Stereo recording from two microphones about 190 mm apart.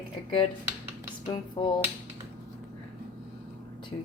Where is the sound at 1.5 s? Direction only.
25° left (ahead or behind).